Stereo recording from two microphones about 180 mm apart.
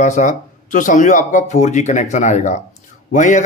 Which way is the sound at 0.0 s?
45° left (ahead or behind).